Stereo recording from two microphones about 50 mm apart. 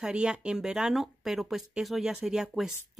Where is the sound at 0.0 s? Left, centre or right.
Centre.